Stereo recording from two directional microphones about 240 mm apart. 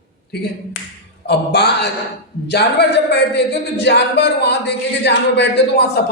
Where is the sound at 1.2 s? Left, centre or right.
Left.